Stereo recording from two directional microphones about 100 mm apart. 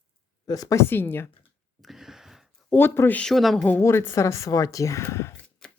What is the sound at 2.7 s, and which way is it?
Speech, 20° left (ahead or behind).